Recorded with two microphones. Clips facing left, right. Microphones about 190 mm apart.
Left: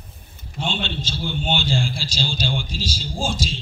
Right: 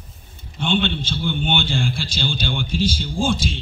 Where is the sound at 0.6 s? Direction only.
55° right (ahead or behind).